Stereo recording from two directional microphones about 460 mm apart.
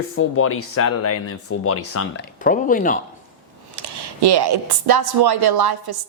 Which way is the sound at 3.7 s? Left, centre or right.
Right.